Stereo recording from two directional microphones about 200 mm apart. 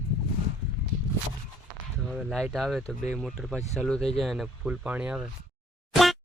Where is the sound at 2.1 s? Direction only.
Centre (ahead or behind).